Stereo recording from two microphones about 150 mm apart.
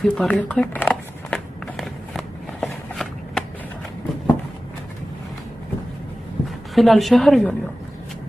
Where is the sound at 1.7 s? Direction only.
Centre (ahead or behind).